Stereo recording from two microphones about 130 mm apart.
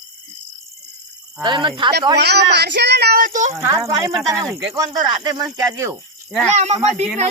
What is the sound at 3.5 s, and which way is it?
Speech, 20° right (ahead or behind).